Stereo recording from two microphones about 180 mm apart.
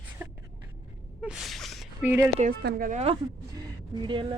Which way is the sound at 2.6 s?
50° right (ahead or behind).